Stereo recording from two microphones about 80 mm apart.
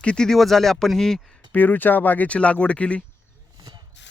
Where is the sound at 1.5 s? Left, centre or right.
Left.